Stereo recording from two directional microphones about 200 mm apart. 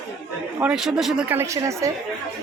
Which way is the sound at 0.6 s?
5° right (ahead or behind).